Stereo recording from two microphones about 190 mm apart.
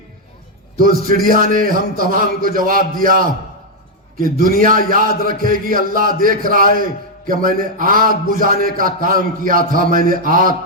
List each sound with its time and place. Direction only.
0.8 s a man's voice: 45° right (ahead or behind)
4.4 s a man's voice: 45° right (ahead or behind)